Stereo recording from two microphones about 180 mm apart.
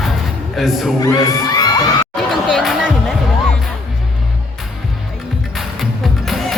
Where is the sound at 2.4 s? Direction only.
5° left (ahead or behind).